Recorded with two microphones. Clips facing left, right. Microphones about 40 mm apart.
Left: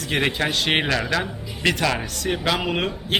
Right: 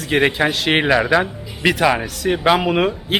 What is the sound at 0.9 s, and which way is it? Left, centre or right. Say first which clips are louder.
Speech: right 8 dB; centre.